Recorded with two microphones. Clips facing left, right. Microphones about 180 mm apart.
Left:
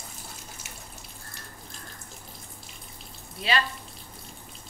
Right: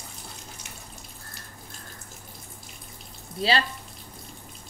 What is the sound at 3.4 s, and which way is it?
Speech, 30° right (ahead or behind).